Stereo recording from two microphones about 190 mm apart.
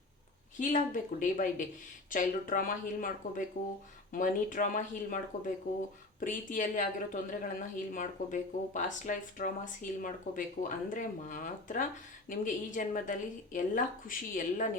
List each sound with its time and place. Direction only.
0.6 s speech: 45° left (ahead or behind)